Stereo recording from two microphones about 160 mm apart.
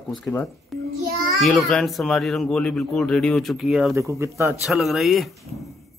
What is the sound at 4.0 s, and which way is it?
Speech, 20° right (ahead or behind).